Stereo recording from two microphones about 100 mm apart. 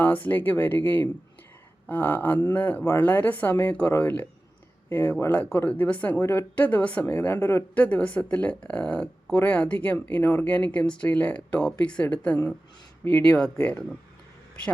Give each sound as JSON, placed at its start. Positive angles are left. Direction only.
{"t": 0.0, "sound": "speech", "side_deg": 20}